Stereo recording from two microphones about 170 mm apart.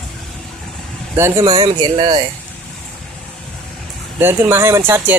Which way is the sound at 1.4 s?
25° right (ahead or behind).